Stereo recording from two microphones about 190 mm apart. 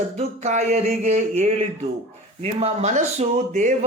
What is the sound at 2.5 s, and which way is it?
Speech, 35° right (ahead or behind).